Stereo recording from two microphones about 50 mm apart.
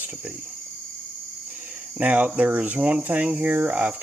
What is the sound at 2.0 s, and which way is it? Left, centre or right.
Speech, right.